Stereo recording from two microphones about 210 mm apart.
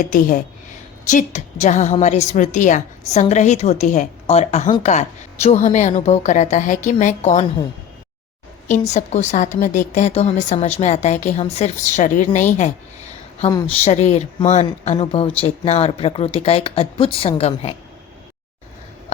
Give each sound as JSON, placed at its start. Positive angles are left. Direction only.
{"t": 0.0, "sound": "a woman's voice", "side_deg": 40}
{"t": 8.7, "sound": "a woman's voice", "side_deg": 35}
{"t": 13.5, "sound": "speech", "side_deg": 20}
{"t": 13.8, "sound": "a woman's voice", "side_deg": 30}